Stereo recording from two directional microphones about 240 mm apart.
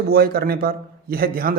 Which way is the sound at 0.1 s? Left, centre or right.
Right.